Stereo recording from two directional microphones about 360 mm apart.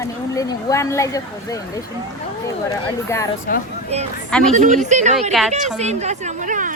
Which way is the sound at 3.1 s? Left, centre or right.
Centre.